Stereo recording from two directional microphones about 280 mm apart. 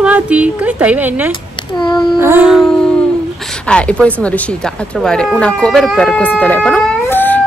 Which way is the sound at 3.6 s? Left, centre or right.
Centre.